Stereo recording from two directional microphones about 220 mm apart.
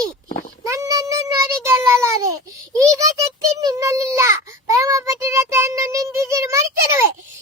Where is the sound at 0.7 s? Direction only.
15° right (ahead or behind).